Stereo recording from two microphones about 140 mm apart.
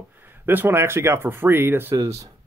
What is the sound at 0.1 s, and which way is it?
Speech, 15° right (ahead or behind).